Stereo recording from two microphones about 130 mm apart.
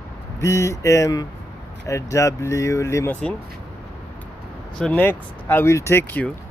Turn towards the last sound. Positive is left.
turn(degrees=15)  # may be behind; listen again after turning